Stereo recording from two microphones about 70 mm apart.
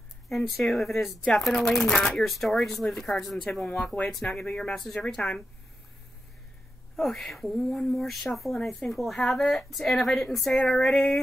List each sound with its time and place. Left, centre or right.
0.3 s speech: centre
7.0 s speech: centre